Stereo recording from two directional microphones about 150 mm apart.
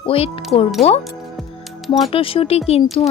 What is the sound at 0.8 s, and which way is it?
Speech, centre (ahead or behind).